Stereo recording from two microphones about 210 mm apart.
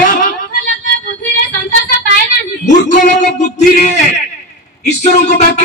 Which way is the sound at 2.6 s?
35° left (ahead or behind).